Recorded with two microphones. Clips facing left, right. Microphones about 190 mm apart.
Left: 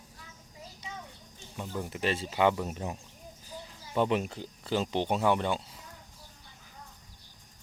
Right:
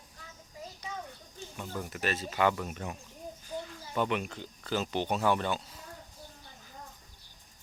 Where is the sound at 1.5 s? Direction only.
25° left (ahead or behind).